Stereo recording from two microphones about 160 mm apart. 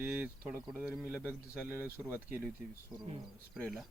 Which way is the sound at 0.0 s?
10° right (ahead or behind).